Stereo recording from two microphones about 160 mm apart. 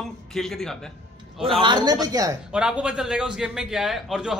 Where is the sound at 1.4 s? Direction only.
35° right (ahead or behind).